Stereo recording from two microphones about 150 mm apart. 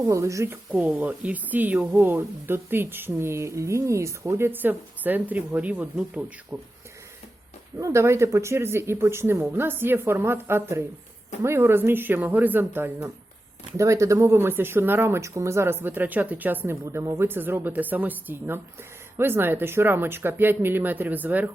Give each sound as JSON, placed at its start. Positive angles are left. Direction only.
{"t": 0.0, "sound": "speech", "side_deg": -20}
{"t": 7.8, "sound": "speech", "side_deg": -20}